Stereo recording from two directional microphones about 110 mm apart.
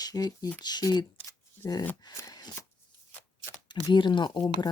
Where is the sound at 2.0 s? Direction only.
35° left (ahead or behind).